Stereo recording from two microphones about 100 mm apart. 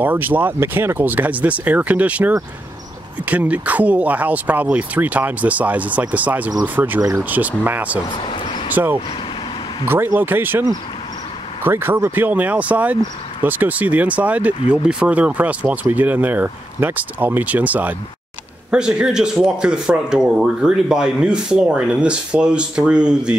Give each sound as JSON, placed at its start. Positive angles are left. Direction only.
{"t": 0.0, "sound": "speech", "side_deg": -20}
{"t": 8.2, "sound": "a sound", "side_deg": 55}
{"t": 9.8, "sound": "speech", "side_deg": -20}
{"t": 11.6, "sound": "speech", "side_deg": -20}